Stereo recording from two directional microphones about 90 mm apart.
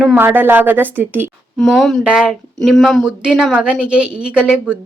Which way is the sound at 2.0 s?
10° right (ahead or behind).